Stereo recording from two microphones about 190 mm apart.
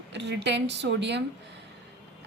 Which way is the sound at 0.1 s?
65° right (ahead or behind).